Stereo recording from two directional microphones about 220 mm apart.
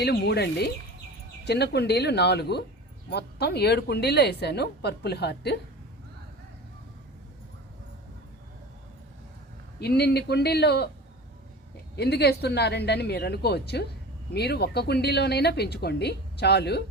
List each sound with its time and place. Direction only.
0.0 s a woman's voice: 50° left (ahead or behind)
9.8 s a woman's voice: 45° left (ahead or behind)
11.9 s a woman's voice: 50° left (ahead or behind)